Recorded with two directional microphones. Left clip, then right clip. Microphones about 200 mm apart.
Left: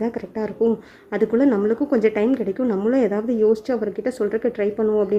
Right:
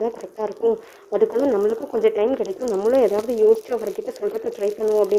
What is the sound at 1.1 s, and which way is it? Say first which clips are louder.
Speech: even; 15° left (ahead or behind).